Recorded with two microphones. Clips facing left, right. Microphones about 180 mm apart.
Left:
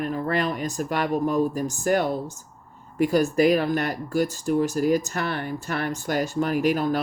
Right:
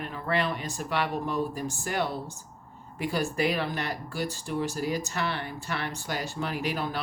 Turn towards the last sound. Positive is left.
turn(degrees=45)  # may be behind; listen again after turning